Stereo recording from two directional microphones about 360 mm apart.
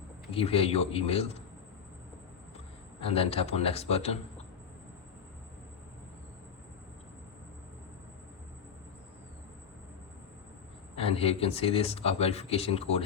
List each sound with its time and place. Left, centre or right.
0.3 s speech: centre
3.0 s speech: centre
10.9 s speech: centre